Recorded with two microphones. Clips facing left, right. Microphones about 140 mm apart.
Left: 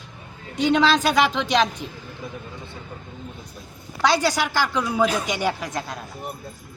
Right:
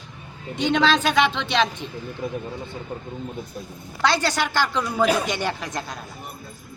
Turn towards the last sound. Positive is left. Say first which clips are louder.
# left 1 dB
turn(degrees=5)  # may be behind; listen again after turning